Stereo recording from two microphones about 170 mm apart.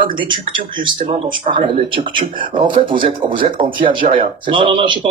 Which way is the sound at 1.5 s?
30° right (ahead or behind).